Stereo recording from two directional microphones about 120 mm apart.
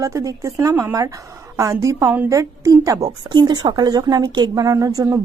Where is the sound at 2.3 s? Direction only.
30° right (ahead or behind).